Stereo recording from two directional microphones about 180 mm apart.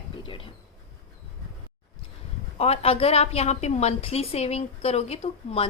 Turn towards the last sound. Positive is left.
turn(degrees=35)  # may be behind; listen again after turning